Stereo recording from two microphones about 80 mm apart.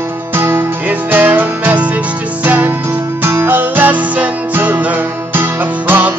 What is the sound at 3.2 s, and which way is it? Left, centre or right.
Music, right.